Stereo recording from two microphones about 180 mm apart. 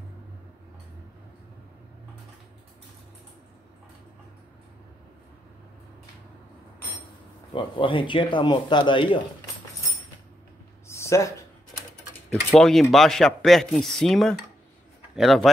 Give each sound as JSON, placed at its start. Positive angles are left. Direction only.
{"t": 7.5, "sound": "a man's voice", "side_deg": 30}
{"t": 10.9, "sound": "a sound", "side_deg": 15}
{"t": 12.4, "sound": "speech", "side_deg": 0}